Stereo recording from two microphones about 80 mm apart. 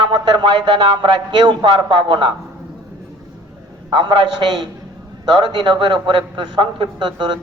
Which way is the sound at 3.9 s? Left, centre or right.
Right.